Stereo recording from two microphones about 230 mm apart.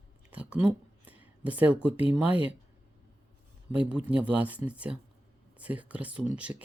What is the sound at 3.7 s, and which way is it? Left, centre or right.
Speech, centre.